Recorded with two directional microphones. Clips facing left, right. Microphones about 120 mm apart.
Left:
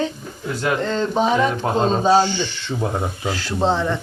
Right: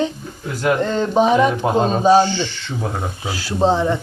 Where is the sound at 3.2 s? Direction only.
10° right (ahead or behind).